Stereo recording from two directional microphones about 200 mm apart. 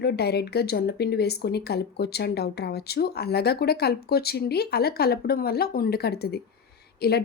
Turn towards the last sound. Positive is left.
turn(degrees=55)  # may be behind; listen again after turning